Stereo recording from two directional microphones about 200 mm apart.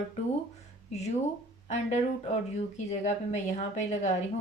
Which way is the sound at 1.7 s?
35° left (ahead or behind).